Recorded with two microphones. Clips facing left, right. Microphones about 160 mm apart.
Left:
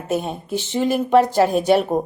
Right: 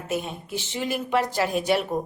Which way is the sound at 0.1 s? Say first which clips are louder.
Left 6 dB; 45° left (ahead or behind).